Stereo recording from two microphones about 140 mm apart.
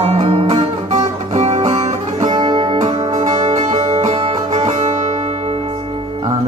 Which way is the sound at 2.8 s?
50° right (ahead or behind).